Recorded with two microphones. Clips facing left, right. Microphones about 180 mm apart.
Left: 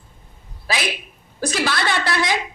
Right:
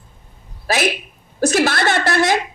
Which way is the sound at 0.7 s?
50° right (ahead or behind).